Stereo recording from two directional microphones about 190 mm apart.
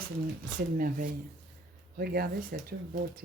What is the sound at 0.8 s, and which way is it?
Speech, 45° right (ahead or behind).